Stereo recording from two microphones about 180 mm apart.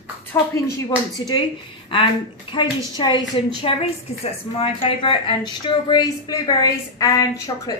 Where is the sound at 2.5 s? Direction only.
25° left (ahead or behind).